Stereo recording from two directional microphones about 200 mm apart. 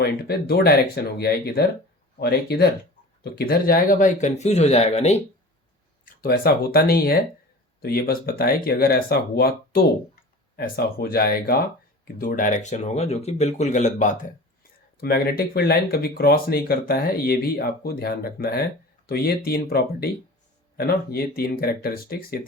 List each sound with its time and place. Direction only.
0.0 s speech: 55° left (ahead or behind); by 5.2 s 35° left (ahead or behind)
6.1 s speech: 45° left (ahead or behind)
15.0 s speech: 50° left (ahead or behind)